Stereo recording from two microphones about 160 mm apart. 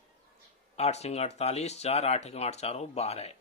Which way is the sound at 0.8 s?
40° left (ahead or behind).